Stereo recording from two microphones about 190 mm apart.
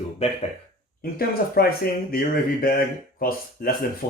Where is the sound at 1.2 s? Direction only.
55° left (ahead or behind).